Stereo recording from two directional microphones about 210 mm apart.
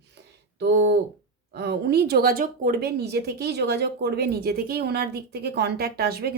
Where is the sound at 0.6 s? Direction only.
50° right (ahead or behind).